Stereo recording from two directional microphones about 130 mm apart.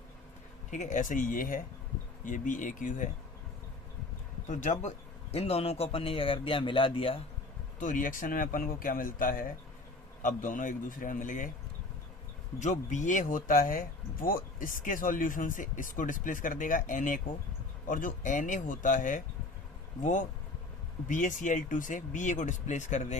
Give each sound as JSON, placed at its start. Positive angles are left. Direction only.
{"t": 0.7, "sound": "speech", "side_deg": 70}
{"t": 4.4, "sound": "a man's voice", "side_deg": 70}
{"t": 7.8, "sound": "speech", "side_deg": 85}
{"t": 12.5, "sound": "speech", "side_deg": 65}
{"t": 20.0, "sound": "speech", "side_deg": 70}
{"t": 21.1, "sound": "speech", "side_deg": 80}